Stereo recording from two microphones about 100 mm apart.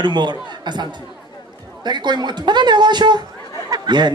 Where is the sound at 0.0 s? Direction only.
50° right (ahead or behind).